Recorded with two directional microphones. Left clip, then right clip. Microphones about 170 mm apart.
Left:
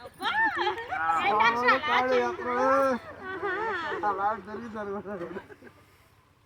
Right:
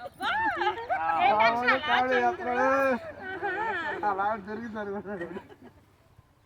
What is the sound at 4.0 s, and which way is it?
Speech, 15° right (ahead or behind).